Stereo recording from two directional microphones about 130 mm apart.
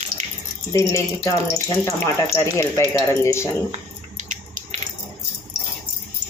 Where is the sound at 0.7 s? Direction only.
20° left (ahead or behind).